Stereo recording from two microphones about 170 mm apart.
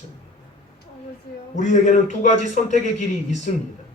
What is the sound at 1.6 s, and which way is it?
A man's voice, 45° left (ahead or behind).